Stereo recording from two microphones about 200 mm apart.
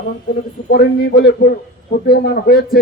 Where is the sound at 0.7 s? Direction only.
55° left (ahead or behind).